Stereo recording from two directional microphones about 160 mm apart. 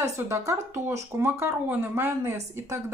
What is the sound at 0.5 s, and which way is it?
Speech, 15° right (ahead or behind).